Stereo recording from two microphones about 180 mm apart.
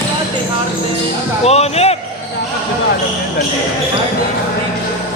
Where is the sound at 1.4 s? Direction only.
35° left (ahead or behind).